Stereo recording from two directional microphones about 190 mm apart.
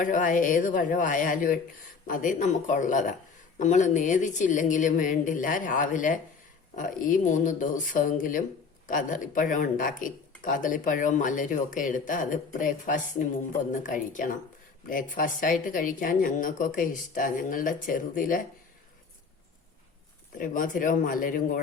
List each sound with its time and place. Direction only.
0.0 s a woman's voice: 45° left (ahead or behind)
20.4 s speech: 45° left (ahead or behind)